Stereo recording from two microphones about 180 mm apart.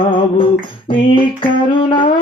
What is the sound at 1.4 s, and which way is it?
Mantra, 30° left (ahead or behind).